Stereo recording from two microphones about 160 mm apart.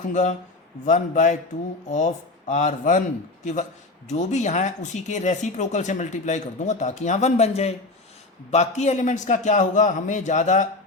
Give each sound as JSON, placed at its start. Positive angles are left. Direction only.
{"t": 0.1, "sound": "speech", "side_deg": 50}
{"t": 2.5, "sound": "speech", "side_deg": 45}